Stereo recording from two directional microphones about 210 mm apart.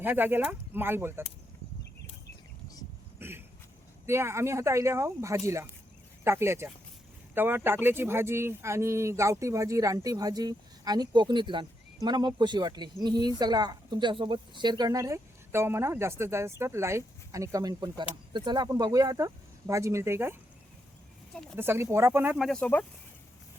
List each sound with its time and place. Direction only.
0.0 s speech: 10° right (ahead or behind)
3.2 s a sound: 10° right (ahead or behind)
4.0 s speech: 10° right (ahead or behind)
21.5 s speech: 10° right (ahead or behind); by 22.9 s 5° left (ahead or behind)